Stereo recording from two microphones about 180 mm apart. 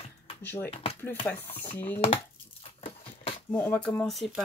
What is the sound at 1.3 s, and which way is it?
Speech, 10° left (ahead or behind).